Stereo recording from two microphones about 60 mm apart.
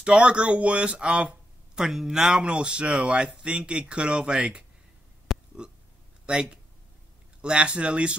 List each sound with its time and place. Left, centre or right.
0.0 s speech: centre
5.3 s burping: centre
7.4 s speech: centre